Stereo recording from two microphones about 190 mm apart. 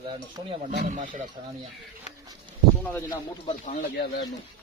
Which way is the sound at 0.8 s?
45° right (ahead or behind).